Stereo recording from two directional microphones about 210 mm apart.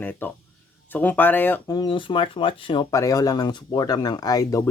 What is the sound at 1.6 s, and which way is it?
Speech, 20° left (ahead or behind).